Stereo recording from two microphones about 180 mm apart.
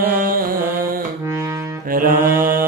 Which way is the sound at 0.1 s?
50° right (ahead or behind).